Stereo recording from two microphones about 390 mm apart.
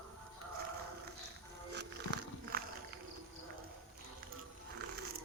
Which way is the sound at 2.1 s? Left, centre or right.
Right.